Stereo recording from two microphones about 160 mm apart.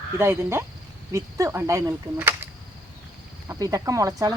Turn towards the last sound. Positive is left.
turn(degrees=-20)  # may be behind; listen again after turning